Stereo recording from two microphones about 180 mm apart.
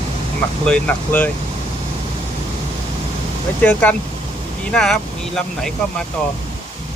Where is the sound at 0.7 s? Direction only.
10° left (ahead or behind).